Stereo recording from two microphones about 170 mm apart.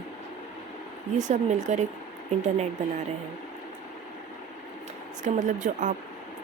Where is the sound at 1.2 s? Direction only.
45° right (ahead or behind).